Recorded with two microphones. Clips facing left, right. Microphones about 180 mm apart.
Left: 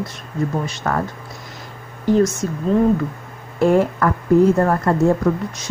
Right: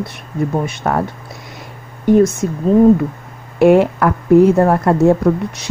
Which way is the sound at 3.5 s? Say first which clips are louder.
Right 5 dB; 70° right (ahead or behind).